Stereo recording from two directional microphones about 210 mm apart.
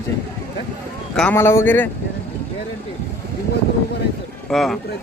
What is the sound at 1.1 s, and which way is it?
Speech, 5° left (ahead or behind).